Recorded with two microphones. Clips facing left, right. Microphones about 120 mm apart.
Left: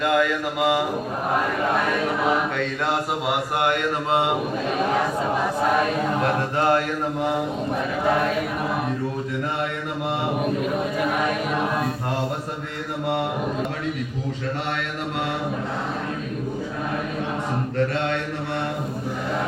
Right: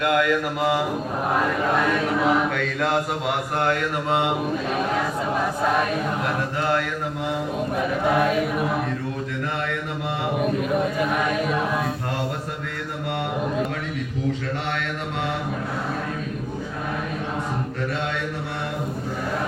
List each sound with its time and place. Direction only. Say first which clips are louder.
0.0 s speech: even; 5° left (ahead or behind)
2.6 s speech: right 1 dB; centre (ahead or behind)
3.6 s mantra: left 1 dB; 25° left (ahead or behind)
6.6 s mantra: left 4 dB; 45° left (ahead or behind)